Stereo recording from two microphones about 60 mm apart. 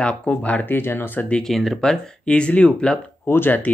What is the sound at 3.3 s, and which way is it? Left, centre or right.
Speech, left.